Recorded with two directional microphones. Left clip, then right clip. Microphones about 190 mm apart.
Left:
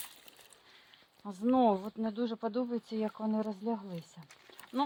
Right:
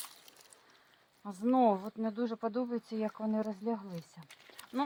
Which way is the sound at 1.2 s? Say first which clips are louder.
Even; 25° left (ahead or behind).